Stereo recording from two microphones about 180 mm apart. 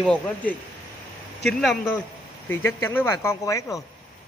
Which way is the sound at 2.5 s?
10° left (ahead or behind).